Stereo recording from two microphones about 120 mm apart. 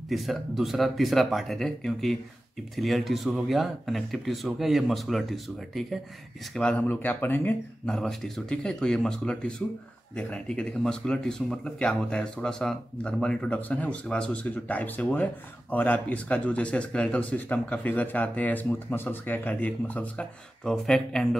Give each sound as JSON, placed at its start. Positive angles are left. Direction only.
{"t": 0.1, "sound": "speech", "side_deg": 0}
{"t": 7.8, "sound": "speech", "side_deg": 5}